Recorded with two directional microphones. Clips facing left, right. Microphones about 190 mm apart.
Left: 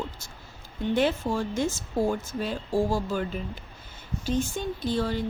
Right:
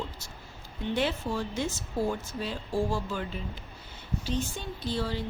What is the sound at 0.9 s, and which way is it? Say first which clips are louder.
Speech: left 5 dB; 50° left (ahead or behind).